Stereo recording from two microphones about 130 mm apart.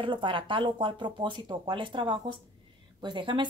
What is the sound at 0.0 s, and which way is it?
A woman's voice, 40° right (ahead or behind).